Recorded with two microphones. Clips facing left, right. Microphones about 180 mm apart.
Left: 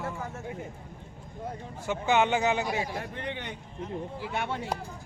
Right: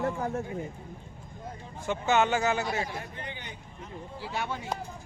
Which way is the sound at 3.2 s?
65° left (ahead or behind).